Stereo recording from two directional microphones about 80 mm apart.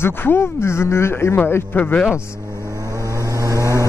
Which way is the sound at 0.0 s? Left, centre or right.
Left.